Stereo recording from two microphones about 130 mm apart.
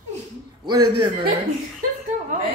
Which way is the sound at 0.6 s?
35° right (ahead or behind).